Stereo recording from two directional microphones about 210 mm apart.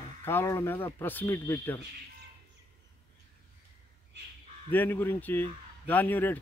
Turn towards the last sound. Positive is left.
turn(degrees=10)  # may be behind; listen again after turning